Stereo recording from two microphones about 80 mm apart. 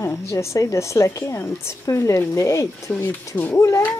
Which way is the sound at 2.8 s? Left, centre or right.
Left.